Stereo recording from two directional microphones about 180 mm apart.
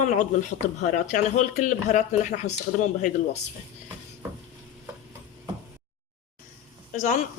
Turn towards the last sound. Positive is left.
turn(degrees=45)  # may be behind; listen again after turning